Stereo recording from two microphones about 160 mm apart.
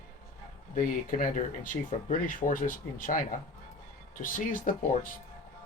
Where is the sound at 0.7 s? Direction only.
55° left (ahead or behind).